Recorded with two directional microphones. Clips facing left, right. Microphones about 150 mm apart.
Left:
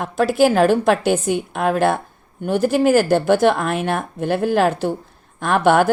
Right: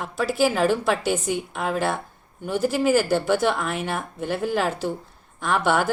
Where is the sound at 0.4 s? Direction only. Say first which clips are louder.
Left 6 dB; 70° left (ahead or behind).